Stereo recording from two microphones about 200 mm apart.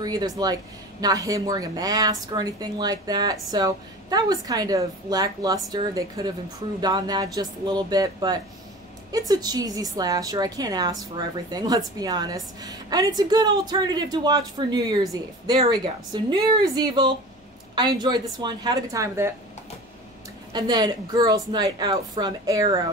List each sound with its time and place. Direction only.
0.0 s a woman's voice: 20° right (ahead or behind)
20.5 s a woman's voice: 20° right (ahead or behind)